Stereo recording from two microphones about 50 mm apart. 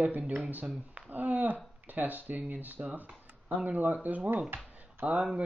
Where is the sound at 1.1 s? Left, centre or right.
Right.